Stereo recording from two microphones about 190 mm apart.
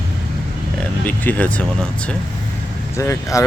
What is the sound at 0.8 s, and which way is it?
Speech, 10° left (ahead or behind).